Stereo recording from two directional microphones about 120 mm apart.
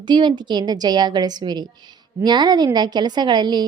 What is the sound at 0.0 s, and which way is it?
A woman's voice, 40° right (ahead or behind).